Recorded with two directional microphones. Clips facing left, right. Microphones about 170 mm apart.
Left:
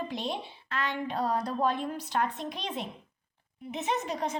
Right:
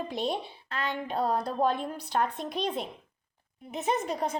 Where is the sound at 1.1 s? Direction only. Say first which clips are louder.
Right 2 dB; 30° right (ahead or behind).